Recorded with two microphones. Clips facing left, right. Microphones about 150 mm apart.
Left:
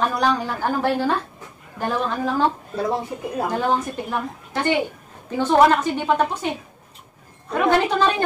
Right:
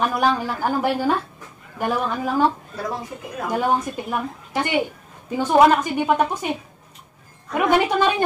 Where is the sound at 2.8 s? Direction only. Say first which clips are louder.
Left 6 dB; 30° left (ahead or behind).